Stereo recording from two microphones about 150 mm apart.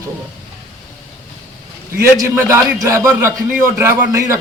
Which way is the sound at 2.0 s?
15° right (ahead or behind).